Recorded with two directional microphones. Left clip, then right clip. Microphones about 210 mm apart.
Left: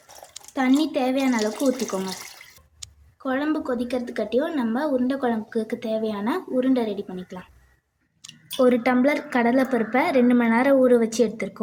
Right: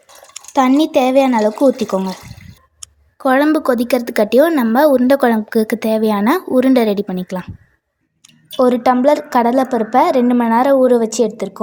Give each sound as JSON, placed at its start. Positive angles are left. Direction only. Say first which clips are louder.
{"t": 0.5, "sound": "a woman's voice", "louder": "right 10 dB", "side_deg": -30}
{"t": 3.2, "sound": "a woman's voice", "louder": "right 12 dB", "side_deg": -35}
{"t": 8.5, "sound": "a woman's voice", "louder": "right 7 dB", "side_deg": -25}